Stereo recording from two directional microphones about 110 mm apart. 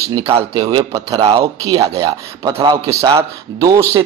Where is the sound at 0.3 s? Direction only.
65° right (ahead or behind).